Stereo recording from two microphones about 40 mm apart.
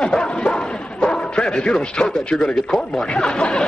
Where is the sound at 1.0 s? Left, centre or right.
Left.